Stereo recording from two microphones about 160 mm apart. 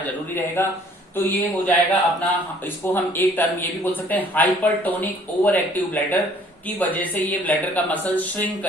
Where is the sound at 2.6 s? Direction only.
15° left (ahead or behind).